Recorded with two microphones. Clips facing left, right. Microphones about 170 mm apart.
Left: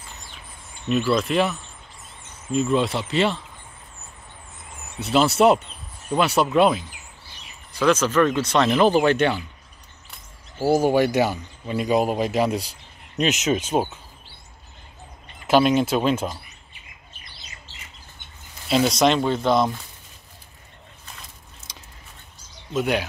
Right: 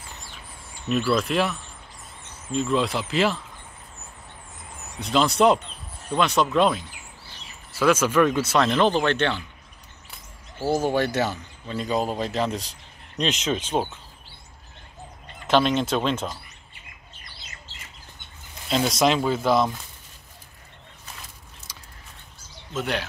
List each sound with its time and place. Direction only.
1.1 s speech: centre (ahead or behind)
5.0 s speech: 5° left (ahead or behind)
7.7 s speech: 10° right (ahead or behind); by 9.4 s 10° left (ahead or behind)
10.6 s speech: 10° left (ahead or behind)
15.4 s speech: 10° left (ahead or behind)
18.7 s speech: centre (ahead or behind)
21.7 s a sound: 20° left (ahead or behind)
22.7 s speech: 10° left (ahead or behind)